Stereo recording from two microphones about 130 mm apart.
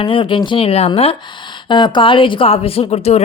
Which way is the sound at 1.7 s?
35° left (ahead or behind).